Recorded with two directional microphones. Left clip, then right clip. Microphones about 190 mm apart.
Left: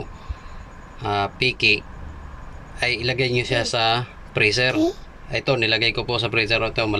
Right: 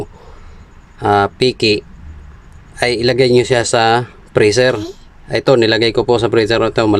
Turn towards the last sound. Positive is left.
turn(degrees=-45)  # may be behind; listen again after turning